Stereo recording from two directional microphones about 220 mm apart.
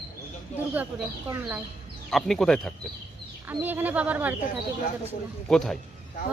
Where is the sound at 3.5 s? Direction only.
10° right (ahead or behind).